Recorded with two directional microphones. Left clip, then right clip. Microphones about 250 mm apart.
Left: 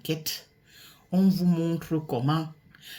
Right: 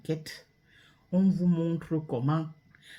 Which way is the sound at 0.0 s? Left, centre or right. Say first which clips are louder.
Left 4 dB; centre.